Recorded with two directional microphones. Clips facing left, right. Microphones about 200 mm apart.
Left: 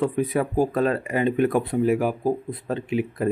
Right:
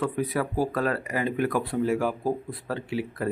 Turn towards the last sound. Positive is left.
turn(degrees=20)  # may be behind; listen again after turning